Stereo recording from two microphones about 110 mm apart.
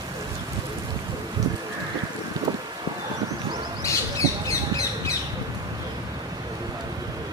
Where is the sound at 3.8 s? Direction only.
30° left (ahead or behind).